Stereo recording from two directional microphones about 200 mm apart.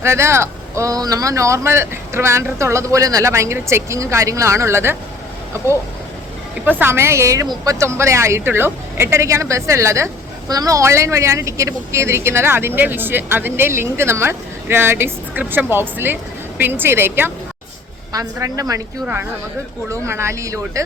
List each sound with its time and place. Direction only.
0.0 s a woman's voice: 15° right (ahead or behind)
6.7 s a woman's voice: 10° right (ahead or behind)